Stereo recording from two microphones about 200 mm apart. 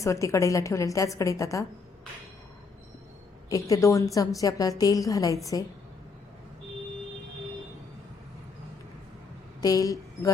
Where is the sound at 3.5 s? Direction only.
15° left (ahead or behind).